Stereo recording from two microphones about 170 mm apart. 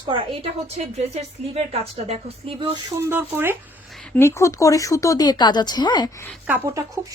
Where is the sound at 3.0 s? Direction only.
15° right (ahead or behind).